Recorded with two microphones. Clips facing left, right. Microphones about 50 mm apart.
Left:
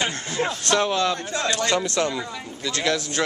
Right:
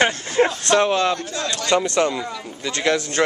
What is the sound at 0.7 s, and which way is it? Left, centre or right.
Speech, right.